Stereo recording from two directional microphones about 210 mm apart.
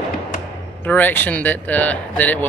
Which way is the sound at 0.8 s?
10° left (ahead or behind).